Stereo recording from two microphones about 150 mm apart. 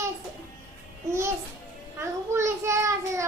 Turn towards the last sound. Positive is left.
turn(degrees=-20)  # may be behind; listen again after turning